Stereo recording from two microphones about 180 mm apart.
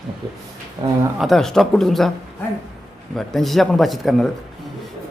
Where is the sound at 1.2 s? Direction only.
Centre (ahead or behind).